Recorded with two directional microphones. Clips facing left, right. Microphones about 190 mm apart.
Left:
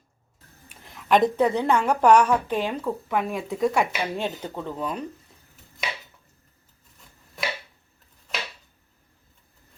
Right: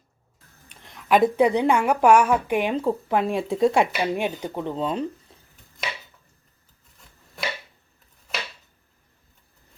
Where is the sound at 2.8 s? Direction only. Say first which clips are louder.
Right 4 dB; 30° right (ahead or behind).